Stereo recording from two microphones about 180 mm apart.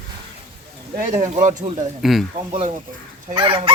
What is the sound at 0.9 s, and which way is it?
Speech, 45° right (ahead or behind).